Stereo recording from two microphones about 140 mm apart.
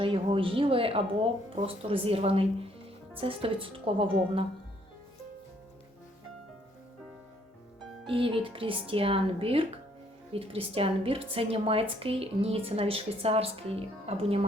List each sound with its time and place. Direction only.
0.0 s speech: 40° right (ahead or behind)
8.0 s a woman's voice: 40° right (ahead or behind)